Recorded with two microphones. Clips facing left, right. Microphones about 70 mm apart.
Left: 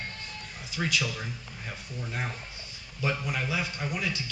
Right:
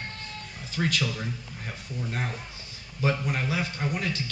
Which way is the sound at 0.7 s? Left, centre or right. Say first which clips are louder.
Right 2 dB; right.